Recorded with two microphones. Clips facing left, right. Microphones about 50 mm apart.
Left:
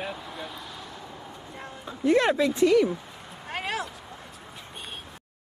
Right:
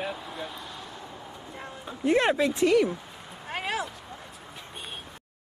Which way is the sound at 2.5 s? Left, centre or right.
Centre.